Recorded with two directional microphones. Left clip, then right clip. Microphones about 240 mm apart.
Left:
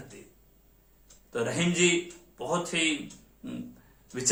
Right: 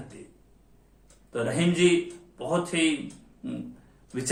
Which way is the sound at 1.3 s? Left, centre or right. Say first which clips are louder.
Right 2 dB; centre.